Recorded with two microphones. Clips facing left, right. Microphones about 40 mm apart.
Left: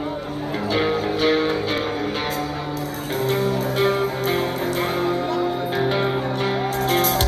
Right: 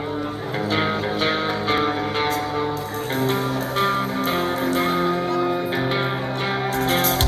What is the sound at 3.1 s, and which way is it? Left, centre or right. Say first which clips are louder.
Music: left 1 dB; right.